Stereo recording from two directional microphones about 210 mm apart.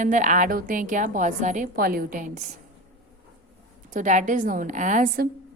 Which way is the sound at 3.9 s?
35° right (ahead or behind).